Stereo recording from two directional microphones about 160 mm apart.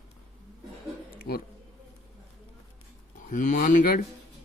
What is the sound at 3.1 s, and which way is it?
Speech, 55° left (ahead or behind).